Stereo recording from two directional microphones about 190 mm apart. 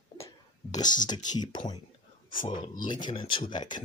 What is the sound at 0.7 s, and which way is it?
Speech, 20° left (ahead or behind).